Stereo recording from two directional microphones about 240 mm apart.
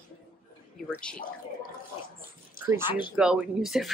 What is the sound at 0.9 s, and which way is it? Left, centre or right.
Speech, centre.